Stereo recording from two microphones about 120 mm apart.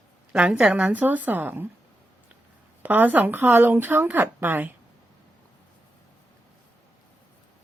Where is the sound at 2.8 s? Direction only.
15° right (ahead or behind).